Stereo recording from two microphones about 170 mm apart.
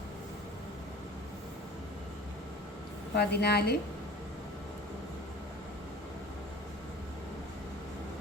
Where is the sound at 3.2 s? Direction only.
70° left (ahead or behind).